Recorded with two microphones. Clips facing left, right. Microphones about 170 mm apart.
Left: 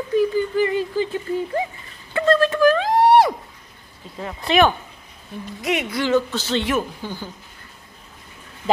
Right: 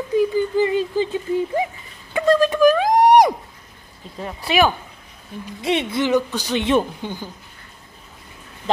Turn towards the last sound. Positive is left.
turn(degrees=-20)  # may be behind; listen again after turning